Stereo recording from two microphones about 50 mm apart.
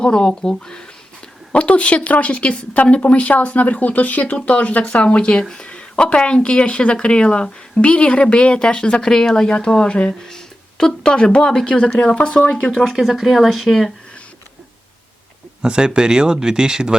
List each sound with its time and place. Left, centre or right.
0.0 s speech: centre
12.8 s speech: centre
15.6 s speech: centre